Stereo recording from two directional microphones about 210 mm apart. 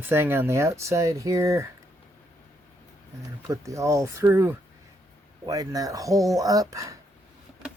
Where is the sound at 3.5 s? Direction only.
15° right (ahead or behind).